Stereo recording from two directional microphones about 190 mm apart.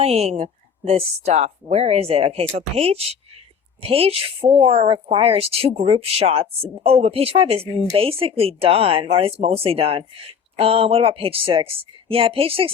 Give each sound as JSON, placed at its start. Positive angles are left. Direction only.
{"t": 0.0, "sound": "speech", "side_deg": -35}